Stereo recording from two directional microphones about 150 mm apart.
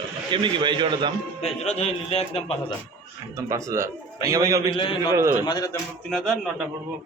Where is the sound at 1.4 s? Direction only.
45° left (ahead or behind).